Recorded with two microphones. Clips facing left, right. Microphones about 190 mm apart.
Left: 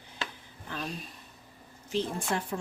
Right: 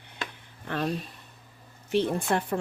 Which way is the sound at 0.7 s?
60° right (ahead or behind).